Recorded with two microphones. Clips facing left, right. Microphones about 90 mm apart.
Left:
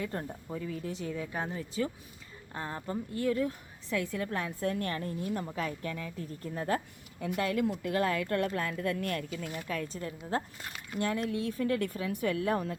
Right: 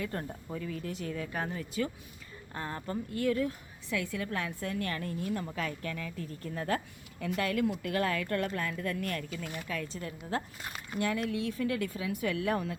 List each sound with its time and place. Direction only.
0.0 s a woman's voice: 20° left (ahead or behind)
10.6 s squish: 30° right (ahead or behind)
11.0 s speech: 30° left (ahead or behind)